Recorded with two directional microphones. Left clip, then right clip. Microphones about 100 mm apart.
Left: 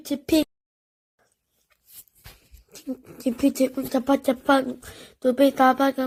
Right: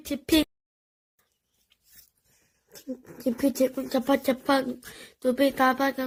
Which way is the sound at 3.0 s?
25° left (ahead or behind).